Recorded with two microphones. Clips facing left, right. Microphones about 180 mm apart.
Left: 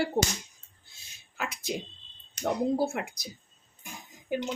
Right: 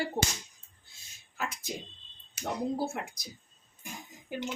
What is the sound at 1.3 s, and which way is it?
Speech, 70° left (ahead or behind).